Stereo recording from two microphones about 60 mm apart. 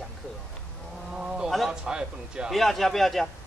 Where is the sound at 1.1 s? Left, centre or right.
Centre.